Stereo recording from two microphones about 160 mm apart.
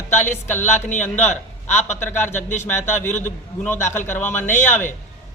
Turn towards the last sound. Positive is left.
turn(degrees=15)  # may be behind; listen again after turning